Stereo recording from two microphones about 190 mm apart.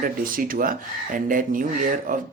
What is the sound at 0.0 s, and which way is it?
Speech, 50° right (ahead or behind).